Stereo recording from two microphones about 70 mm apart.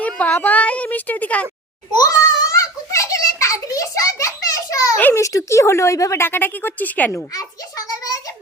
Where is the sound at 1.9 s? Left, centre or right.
Left.